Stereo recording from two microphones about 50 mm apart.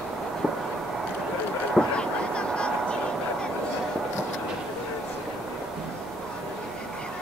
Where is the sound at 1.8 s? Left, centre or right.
Centre.